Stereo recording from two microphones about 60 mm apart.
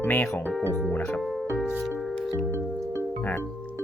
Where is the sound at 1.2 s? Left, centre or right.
Centre.